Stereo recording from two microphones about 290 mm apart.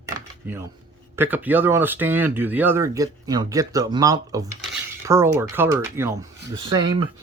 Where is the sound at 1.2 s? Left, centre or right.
Centre.